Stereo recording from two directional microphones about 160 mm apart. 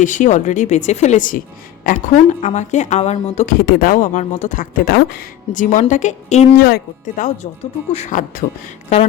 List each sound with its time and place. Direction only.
0.0 s a woman's voice: 50° left (ahead or behind); by 5.5 s 70° left (ahead or behind)
5.5 s a woman's voice: 50° left (ahead or behind)
6.6 s a woman's voice: 70° left (ahead or behind); by 8.2 s 45° left (ahead or behind)